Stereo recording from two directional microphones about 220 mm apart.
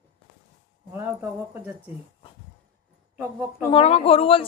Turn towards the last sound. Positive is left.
turn(degrees=25)  # may be behind; listen again after turning